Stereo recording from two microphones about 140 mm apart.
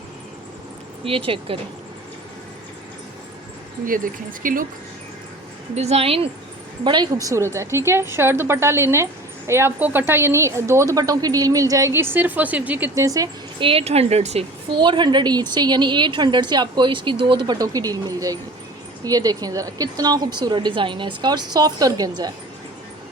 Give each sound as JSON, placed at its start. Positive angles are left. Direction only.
{"t": 1.0, "sound": "a woman's voice", "side_deg": -40}
{"t": 3.8, "sound": "speech", "side_deg": -80}
{"t": 5.7, "sound": "speech", "side_deg": -50}
{"t": 6.8, "sound": "a woman's voice", "side_deg": -30}
{"t": 13.1, "sound": "a woman's voice", "side_deg": -25}
{"t": 13.6, "sound": "speech", "side_deg": -40}
{"t": 14.7, "sound": "a woman's voice", "side_deg": -35}